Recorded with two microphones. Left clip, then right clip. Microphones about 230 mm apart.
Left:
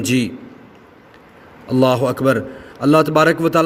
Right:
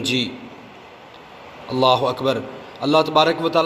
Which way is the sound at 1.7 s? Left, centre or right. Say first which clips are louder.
Left 1 dB; left.